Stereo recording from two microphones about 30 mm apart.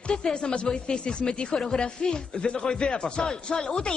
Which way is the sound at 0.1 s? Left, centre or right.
Left.